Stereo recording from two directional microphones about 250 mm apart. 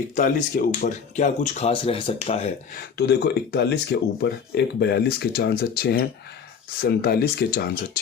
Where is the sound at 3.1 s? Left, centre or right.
Left.